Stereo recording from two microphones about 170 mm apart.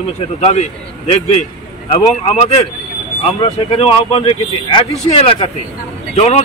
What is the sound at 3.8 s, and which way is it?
A man's voice, 35° left (ahead or behind).